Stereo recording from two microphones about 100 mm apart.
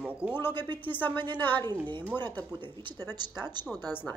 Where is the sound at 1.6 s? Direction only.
50° right (ahead or behind).